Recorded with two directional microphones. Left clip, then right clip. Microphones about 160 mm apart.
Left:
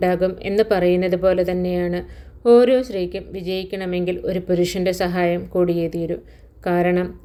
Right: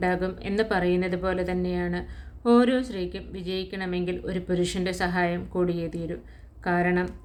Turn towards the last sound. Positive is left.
turn(degrees=15)  # may be behind; listen again after turning